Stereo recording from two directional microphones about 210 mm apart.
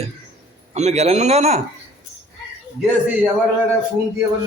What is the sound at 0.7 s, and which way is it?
Speech, 30° right (ahead or behind).